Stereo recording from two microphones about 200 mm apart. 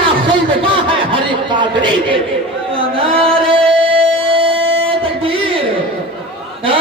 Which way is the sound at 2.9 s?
25° right (ahead or behind).